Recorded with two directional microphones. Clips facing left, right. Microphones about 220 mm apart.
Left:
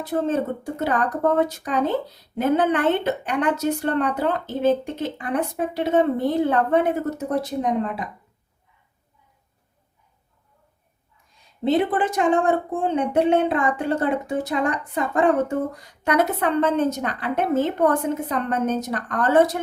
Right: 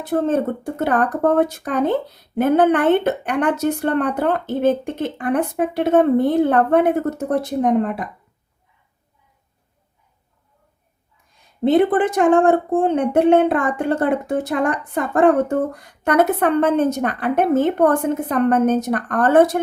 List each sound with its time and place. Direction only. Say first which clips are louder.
0.0 s speech: right 4 dB; 55° right (ahead or behind)
11.6 s speech: right 5 dB; 50° right (ahead or behind)